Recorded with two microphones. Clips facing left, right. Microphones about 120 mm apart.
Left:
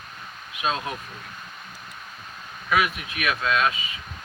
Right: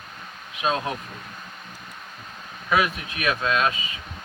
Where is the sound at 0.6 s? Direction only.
30° right (ahead or behind).